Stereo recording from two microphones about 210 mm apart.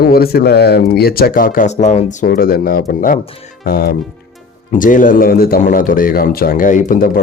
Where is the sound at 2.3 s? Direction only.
45° left (ahead or behind).